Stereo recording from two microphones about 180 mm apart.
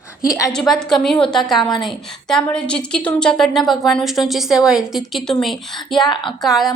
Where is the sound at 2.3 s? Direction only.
5° left (ahead or behind).